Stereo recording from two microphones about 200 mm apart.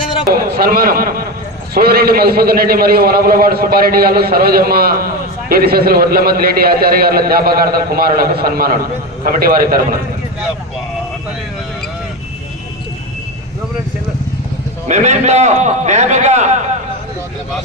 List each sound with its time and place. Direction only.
0.3 s a man's voice: 50° right (ahead or behind)
14.8 s a man's voice: 35° right (ahead or behind)